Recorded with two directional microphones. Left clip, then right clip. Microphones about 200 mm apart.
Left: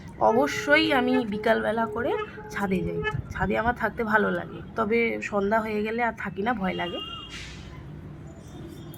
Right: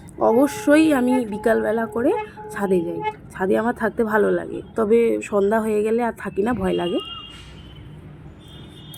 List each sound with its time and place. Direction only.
0.2 s a woman's voice: 25° right (ahead or behind)